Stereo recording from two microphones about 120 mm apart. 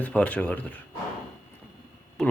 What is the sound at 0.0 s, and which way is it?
Speech, 15° left (ahead or behind).